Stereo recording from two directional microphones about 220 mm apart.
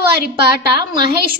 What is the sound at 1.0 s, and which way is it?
Speech, 45° right (ahead or behind).